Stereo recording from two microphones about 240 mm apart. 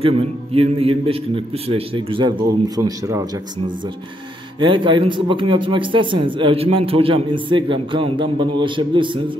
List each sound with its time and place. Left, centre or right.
0.0 s speech: right